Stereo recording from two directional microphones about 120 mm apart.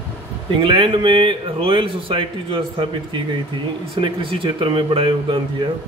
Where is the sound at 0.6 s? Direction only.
45° right (ahead or behind).